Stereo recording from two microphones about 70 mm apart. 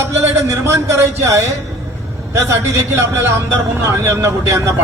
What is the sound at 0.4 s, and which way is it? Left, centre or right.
A man's voice, right.